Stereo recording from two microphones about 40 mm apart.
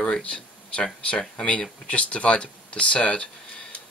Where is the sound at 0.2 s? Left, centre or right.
Left.